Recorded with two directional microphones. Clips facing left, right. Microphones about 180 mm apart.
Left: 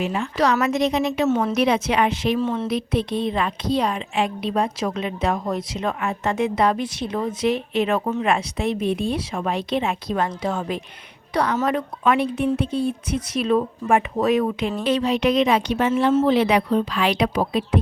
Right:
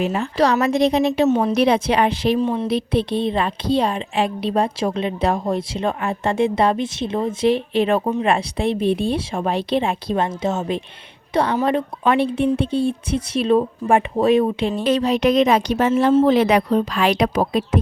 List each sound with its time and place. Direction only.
0.0 s speech: 35° right (ahead or behind)
2.4 s speech: 15° right (ahead or behind)
2.6 s a woman's voice: 30° right (ahead or behind)
14.8 s a woman's voice: 40° right (ahead or behind)